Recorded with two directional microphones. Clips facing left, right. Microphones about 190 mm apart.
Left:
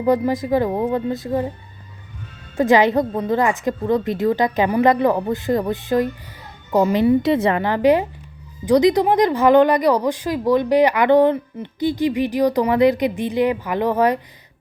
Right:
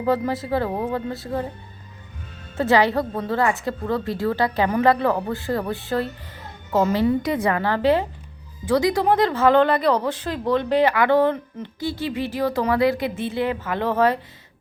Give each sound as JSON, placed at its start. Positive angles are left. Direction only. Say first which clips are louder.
{"t": 0.0, "sound": "speech", "louder": "left 4 dB", "side_deg": 15}
{"t": 2.6, "sound": "speech", "louder": "left 4 dB", "side_deg": 15}
{"t": 7.2, "sound": "a woman's voice", "louder": "left 4 dB", "side_deg": 25}